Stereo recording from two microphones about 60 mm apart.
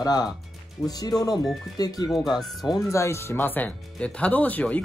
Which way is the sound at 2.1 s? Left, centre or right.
Centre.